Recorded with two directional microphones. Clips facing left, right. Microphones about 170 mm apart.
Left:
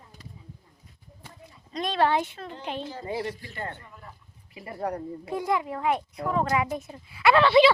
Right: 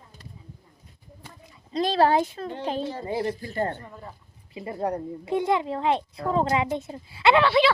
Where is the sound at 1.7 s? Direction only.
30° right (ahead or behind).